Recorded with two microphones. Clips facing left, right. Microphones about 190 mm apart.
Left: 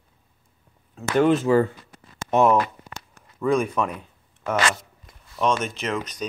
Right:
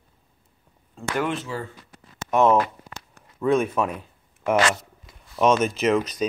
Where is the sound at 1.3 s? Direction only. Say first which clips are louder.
Left 11 dB; 50° left (ahead or behind).